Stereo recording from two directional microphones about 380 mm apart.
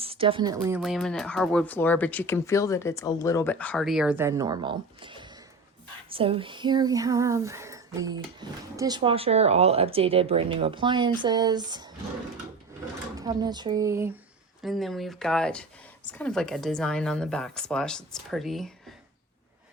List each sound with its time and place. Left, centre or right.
0.0 s speech: centre
6.1 s female singing: centre
13.1 s female singing: centre
14.6 s speech: centre